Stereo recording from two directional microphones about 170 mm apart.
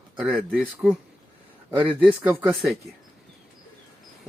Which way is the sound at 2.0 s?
10° right (ahead or behind).